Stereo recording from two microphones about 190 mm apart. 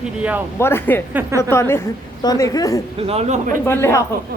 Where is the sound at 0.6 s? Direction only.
10° left (ahead or behind).